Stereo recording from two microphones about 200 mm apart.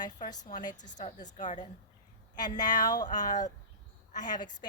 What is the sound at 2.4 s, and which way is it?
Speech, 20° left (ahead or behind).